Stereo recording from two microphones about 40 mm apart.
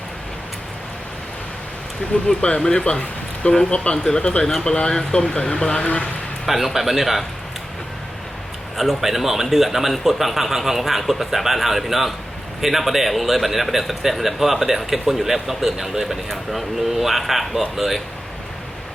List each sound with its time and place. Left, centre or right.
2.2 s speech: left
6.4 s speech: centre
8.7 s speech: centre